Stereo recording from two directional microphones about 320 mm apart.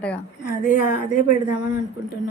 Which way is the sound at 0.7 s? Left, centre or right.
Left.